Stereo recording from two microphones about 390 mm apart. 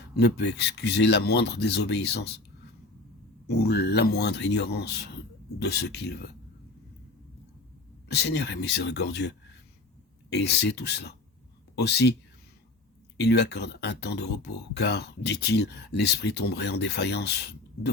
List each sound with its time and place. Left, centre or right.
0.2 s speech: left
3.4 s speech: left
8.0 s speech: left
13.1 s speech: left